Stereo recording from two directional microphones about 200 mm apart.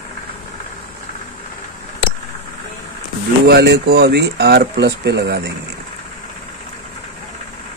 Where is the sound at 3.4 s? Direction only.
55° right (ahead or behind).